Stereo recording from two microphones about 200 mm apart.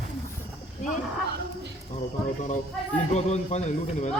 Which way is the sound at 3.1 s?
35° left (ahead or behind).